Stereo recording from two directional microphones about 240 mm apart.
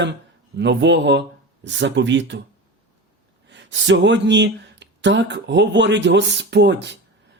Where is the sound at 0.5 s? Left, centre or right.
Right.